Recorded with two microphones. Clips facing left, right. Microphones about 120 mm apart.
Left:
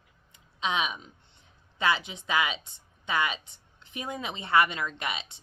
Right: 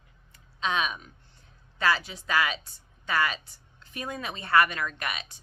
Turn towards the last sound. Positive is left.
turn(degrees=25)  # may be behind; listen again after turning